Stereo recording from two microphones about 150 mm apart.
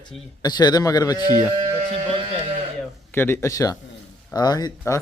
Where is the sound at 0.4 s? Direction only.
25° left (ahead or behind).